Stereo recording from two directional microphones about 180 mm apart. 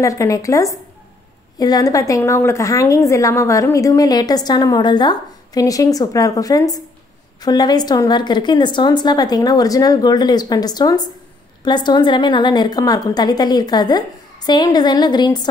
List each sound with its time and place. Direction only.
0.0 s a woman's voice: 15° left (ahead or behind)